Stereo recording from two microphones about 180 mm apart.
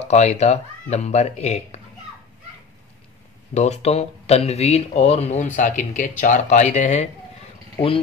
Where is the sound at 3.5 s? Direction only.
40° left (ahead or behind).